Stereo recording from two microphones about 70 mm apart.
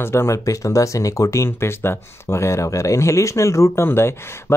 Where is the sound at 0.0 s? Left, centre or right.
Left.